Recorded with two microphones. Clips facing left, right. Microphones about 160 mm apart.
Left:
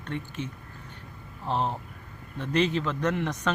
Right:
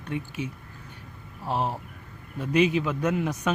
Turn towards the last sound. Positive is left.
turn(degrees=-10)  # may be behind; listen again after turning